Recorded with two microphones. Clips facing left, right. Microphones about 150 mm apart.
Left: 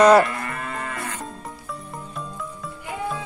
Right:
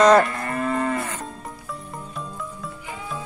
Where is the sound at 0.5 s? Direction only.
35° right (ahead or behind).